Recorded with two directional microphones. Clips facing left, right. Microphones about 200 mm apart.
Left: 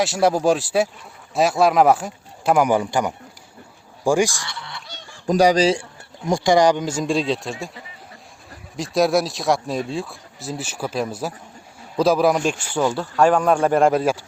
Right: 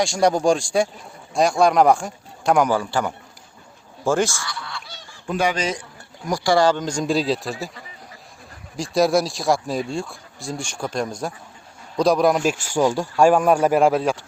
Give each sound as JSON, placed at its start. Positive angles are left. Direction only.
{"t": 0.0, "sound": "speech", "side_deg": 5}
{"t": 2.7, "sound": "a man's voice", "side_deg": 15}
{"t": 5.2, "sound": "speech", "side_deg": 40}
{"t": 8.7, "sound": "speech", "side_deg": 0}